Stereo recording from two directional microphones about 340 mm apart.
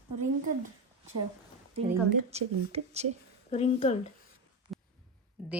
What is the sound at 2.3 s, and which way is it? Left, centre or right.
Speech, centre.